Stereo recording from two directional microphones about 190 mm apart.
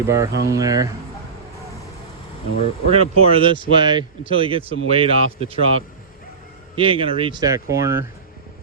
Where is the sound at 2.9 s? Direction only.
30° right (ahead or behind).